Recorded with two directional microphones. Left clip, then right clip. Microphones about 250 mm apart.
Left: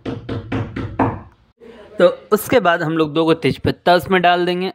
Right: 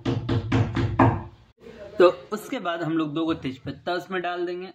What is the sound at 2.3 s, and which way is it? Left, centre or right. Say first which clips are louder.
Speech: left 15 dB; left.